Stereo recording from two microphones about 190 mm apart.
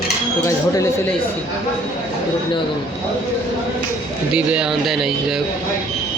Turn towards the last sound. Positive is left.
turn(degrees=0)  # may be behind; listen again after turning